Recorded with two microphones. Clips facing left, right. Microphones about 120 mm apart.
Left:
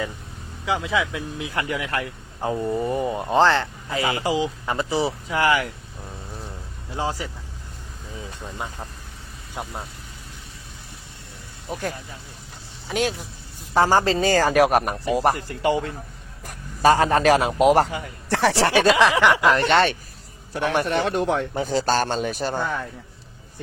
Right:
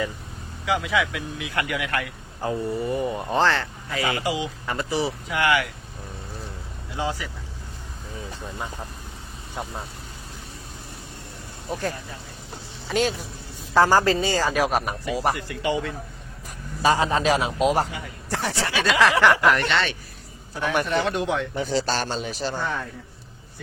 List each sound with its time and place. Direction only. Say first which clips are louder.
0.6 s speech: even; 25° left (ahead or behind)
4.6 s speech: left 2 dB; 20° left (ahead or behind)
6.9 s speech: left 1 dB; 35° left (ahead or behind)
9.6 s speech: even; 10° left (ahead or behind)
11.7 s speech: right 1 dB; 5° left (ahead or behind)
13.7 s speech: even; 20° left (ahead or behind)
14.2 s a man's voice: left 5 dB; 50° left (ahead or behind)
15.4 s speech: left 4 dB; 35° left (ahead or behind)
16.8 s a man's voice: left 4 dB; 55° left (ahead or behind)
18.3 s speech: left 8 dB; 75° left (ahead or behind)
18.9 s speech: left 1 dB; 20° left (ahead or behind)
19.5 s speech: left 2 dB; 35° left (ahead or behind)
19.7 s speech: left 6 dB; 45° left (ahead or behind)
20.7 s speech: left 1 dB; 30° left (ahead or behind); by 22.6 s 50° left (ahead or behind)